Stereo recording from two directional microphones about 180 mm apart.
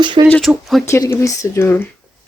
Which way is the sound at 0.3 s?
5° left (ahead or behind).